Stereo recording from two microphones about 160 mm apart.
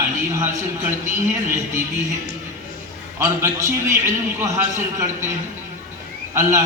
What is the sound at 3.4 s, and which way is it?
A man's voice, 20° right (ahead or behind).